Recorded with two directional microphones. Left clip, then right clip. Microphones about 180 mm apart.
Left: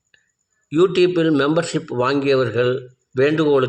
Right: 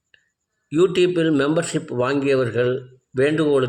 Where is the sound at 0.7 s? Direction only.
5° left (ahead or behind).